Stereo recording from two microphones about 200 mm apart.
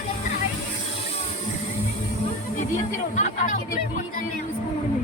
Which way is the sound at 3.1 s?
40° left (ahead or behind).